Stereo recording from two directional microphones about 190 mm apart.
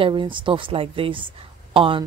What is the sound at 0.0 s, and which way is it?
Speech, 25° right (ahead or behind).